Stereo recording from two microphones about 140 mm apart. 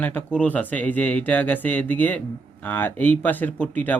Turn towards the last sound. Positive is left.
turn(degrees=10)  # may be behind; listen again after turning